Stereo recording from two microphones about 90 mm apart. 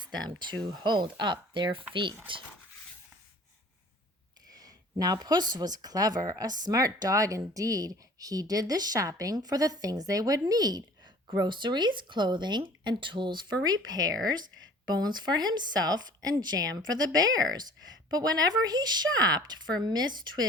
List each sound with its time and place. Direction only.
0.0 s speech: 55° right (ahead or behind)
4.4 s speech: 45° right (ahead or behind)
11.3 s speech: 60° right (ahead or behind)